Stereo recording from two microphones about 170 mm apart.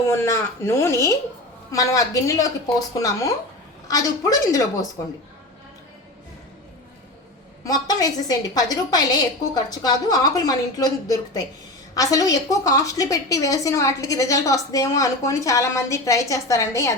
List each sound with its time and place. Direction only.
0.1 s a woman's voice: 15° left (ahead or behind)
7.6 s a woman's voice: 20° left (ahead or behind)